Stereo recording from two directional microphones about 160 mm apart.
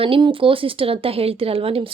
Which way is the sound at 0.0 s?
35° right (ahead or behind).